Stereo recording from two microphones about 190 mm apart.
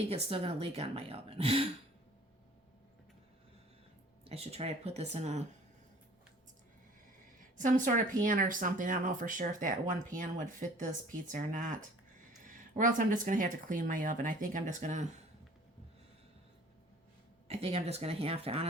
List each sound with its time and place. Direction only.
0.1 s a woman's voice: 30° right (ahead or behind)
4.2 s a woman's voice: 30° right (ahead or behind)
7.5 s speech: 40° right (ahead or behind)
17.5 s a woman's voice: 30° right (ahead or behind)